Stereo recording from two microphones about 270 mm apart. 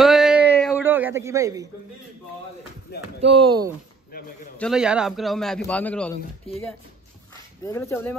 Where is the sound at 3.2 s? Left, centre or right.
Centre.